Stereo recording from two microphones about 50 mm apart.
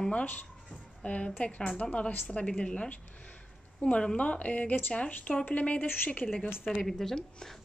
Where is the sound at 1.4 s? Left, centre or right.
Left.